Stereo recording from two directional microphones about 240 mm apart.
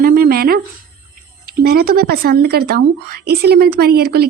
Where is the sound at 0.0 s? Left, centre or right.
Right.